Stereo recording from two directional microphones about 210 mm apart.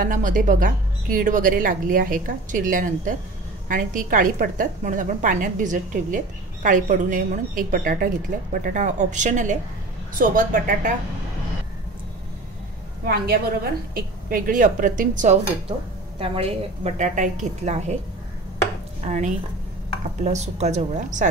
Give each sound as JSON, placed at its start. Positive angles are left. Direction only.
{"t": 0.0, "sound": "a woman's voice", "side_deg": -40}
{"t": 13.0, "sound": "a woman's voice", "side_deg": -45}
{"t": 16.2, "sound": "a woman's voice", "side_deg": -25}
{"t": 19.0, "sound": "a woman's voice", "side_deg": -35}